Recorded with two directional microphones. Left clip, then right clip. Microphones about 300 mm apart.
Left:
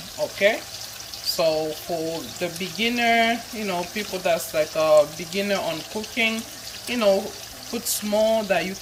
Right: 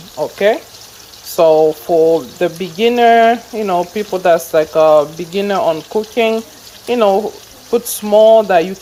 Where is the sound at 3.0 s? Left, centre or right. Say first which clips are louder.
Right 11 dB; right.